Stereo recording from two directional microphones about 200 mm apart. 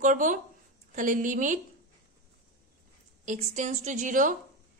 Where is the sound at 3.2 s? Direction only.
35° right (ahead or behind).